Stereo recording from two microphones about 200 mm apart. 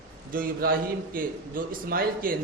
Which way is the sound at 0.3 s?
45° right (ahead or behind).